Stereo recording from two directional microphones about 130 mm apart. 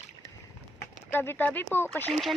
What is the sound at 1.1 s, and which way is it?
Speech, 15° left (ahead or behind).